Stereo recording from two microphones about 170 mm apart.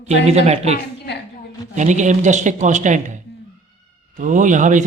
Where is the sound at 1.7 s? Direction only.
45° right (ahead or behind).